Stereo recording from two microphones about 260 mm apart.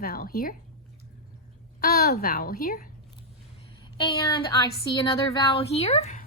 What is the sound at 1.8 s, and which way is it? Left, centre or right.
A woman's voice, left.